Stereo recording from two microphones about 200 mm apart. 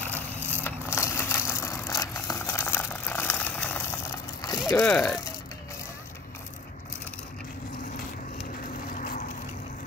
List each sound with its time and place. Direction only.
0.0 s vehicle: 10° left (ahead or behind)
4.6 s speech: 15° left (ahead or behind)
8.9 s vehicle: 45° left (ahead or behind)